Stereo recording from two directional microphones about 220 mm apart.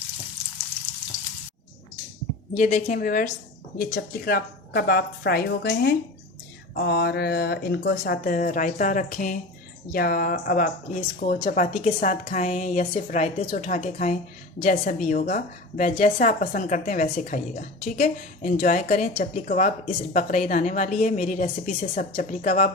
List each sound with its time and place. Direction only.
2.6 s speech: 30° left (ahead or behind)